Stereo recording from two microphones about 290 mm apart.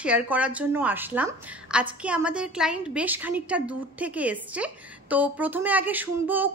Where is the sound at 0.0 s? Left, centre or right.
Centre.